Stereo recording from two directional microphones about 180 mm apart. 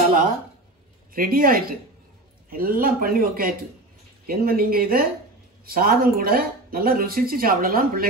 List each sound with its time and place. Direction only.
1.1 s speech: 55° right (ahead or behind)